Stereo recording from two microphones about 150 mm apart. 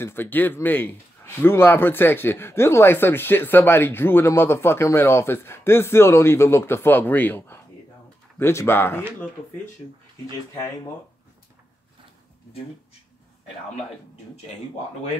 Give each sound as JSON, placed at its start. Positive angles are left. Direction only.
{"t": 0.0, "sound": "speech", "side_deg": 15}